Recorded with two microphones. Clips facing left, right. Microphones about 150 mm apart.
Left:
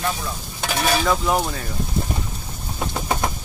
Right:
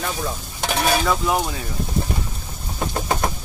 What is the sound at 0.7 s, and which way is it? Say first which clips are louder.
Speech: even; centre (ahead or behind).